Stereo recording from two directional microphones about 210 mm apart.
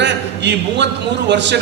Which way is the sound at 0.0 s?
55° right (ahead or behind).